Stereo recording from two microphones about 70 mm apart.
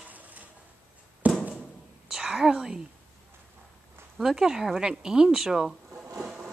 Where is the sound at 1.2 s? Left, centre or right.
Centre.